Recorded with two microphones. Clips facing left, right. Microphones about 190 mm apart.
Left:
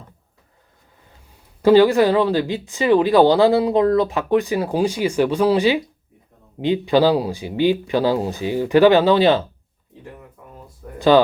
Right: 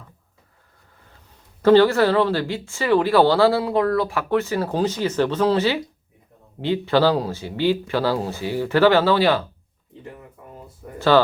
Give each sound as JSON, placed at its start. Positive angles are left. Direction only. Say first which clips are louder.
{"t": 1.6, "sound": "speech", "louder": "left 2 dB", "side_deg": 10}
{"t": 10.9, "sound": "speech", "louder": "left 3 dB", "side_deg": 15}